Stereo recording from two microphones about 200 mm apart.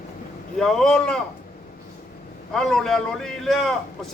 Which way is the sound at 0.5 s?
Centre (ahead or behind).